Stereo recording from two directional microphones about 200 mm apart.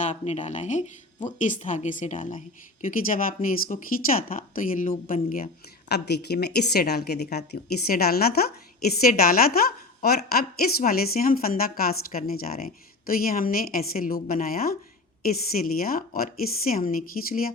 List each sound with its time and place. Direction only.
0.1 s a woman's voice: 35° left (ahead or behind)
5.9 s a woman's voice: 55° left (ahead or behind)